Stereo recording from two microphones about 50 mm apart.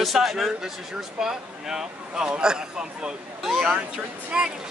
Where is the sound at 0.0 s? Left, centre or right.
Centre.